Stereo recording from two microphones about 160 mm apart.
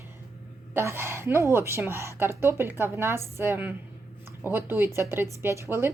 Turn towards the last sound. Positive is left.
turn(degrees=-15)  # may be behind; listen again after turning